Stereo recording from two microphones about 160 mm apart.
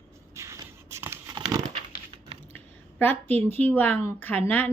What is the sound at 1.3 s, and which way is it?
Crumpling, 25° right (ahead or behind).